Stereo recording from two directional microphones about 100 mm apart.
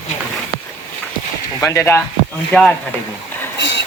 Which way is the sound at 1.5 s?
25° left (ahead or behind).